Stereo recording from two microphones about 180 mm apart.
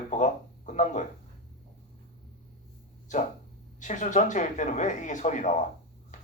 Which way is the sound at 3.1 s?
45° left (ahead or behind).